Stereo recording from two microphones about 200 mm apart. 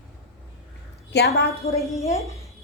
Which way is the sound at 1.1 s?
55° left (ahead or behind).